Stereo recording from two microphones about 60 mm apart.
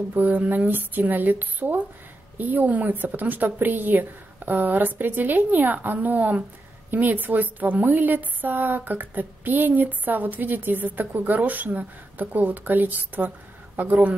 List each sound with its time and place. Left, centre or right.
0.1 s speech: right